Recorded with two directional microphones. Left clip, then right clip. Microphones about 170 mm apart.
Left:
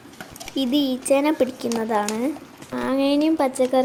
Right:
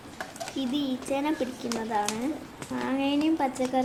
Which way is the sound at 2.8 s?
35° left (ahead or behind).